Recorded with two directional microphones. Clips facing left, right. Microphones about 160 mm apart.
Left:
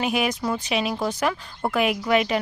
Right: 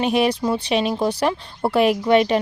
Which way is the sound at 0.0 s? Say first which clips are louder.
Right 5 dB; 30° right (ahead or behind).